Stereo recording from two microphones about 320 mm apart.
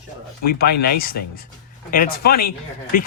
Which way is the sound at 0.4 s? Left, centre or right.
Left.